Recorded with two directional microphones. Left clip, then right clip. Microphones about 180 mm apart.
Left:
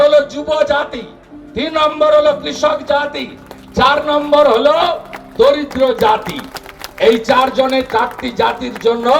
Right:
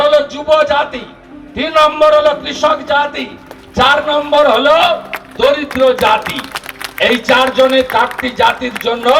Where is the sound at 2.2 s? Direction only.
90° left.